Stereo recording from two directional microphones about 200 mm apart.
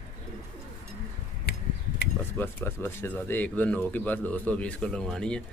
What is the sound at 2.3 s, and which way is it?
A man's voice, 10° left (ahead or behind).